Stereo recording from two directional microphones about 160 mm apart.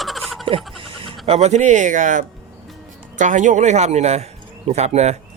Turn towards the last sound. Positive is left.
turn(degrees=-45)  # may be behind; listen again after turning